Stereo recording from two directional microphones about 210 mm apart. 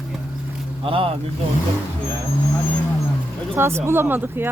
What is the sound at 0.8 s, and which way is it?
Speech, 25° right (ahead or behind).